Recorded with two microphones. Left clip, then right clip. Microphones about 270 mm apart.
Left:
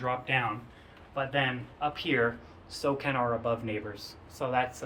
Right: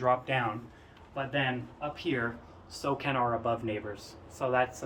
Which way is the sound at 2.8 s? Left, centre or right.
Left.